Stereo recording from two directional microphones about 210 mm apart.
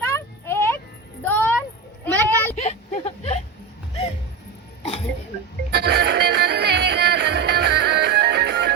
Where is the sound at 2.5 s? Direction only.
30° left (ahead or behind).